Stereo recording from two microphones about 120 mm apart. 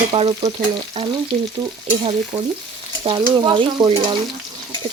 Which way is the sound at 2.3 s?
45° right (ahead or behind).